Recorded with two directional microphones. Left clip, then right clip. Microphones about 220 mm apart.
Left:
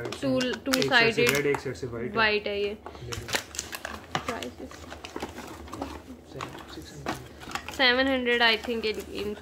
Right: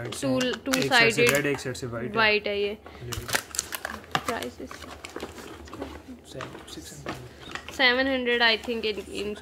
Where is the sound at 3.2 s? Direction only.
25° right (ahead or behind).